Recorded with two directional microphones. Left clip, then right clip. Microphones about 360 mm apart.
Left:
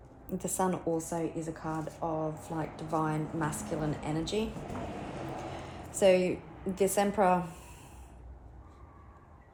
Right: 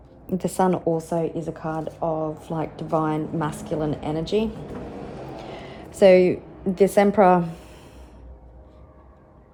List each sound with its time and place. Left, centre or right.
0.3 s a woman's voice: right
6.0 s a woman's voice: right
7.4 s a sound: right